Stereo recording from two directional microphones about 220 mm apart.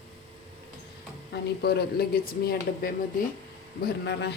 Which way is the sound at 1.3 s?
45° left (ahead or behind).